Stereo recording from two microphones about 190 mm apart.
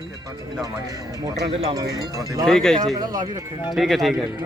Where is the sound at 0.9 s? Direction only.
20° right (ahead or behind).